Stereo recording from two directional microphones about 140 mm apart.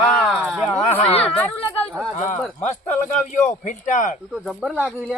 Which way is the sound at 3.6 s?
65° left (ahead or behind).